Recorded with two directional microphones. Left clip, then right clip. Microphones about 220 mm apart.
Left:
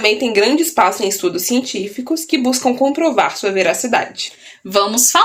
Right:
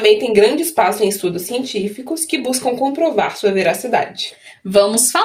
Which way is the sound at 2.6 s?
45° left (ahead or behind).